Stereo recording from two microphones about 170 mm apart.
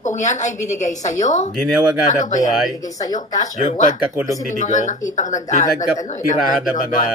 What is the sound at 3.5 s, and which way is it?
A woman's voice, 45° left (ahead or behind).